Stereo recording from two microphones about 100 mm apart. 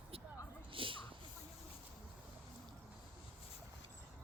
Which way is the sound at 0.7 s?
60° right (ahead or behind).